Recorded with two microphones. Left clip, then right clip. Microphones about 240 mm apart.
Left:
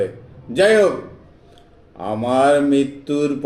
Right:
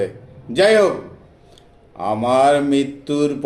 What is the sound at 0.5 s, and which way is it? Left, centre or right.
Speech, right.